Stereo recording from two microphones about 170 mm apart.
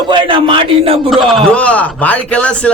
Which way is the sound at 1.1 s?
Centre (ahead or behind).